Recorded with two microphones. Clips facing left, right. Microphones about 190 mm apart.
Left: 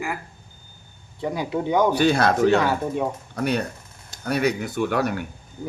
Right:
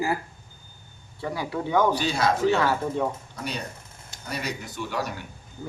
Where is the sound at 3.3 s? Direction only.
60° left (ahead or behind).